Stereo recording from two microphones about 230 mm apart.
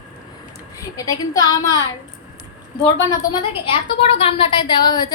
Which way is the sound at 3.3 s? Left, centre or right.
Left.